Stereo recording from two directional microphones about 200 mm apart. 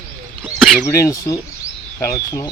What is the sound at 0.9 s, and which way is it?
Speech, 15° left (ahead or behind).